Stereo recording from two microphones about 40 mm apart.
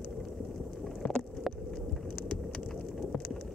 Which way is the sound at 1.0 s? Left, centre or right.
Centre.